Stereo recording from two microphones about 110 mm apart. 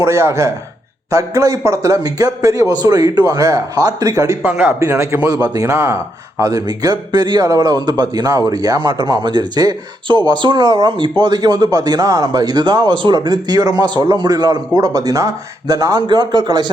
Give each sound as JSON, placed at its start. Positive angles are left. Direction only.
{"t": 0.0, "sound": "speech", "side_deg": -25}
{"t": 4.4, "sound": "a man's voice", "side_deg": -15}
{"t": 5.3, "sound": "speech", "side_deg": -35}